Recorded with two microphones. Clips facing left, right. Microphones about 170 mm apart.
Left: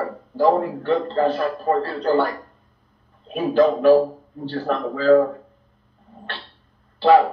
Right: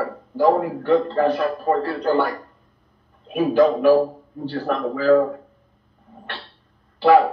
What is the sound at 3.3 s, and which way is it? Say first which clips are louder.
A man's voice: right 1 dB; 15° right (ahead or behind).